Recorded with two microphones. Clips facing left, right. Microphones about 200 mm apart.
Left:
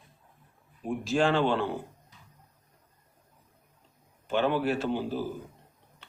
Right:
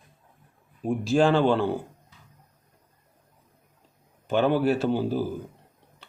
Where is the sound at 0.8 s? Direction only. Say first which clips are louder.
Right 5 dB; 40° right (ahead or behind).